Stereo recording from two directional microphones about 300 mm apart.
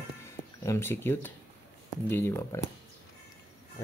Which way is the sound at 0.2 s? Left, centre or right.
Centre.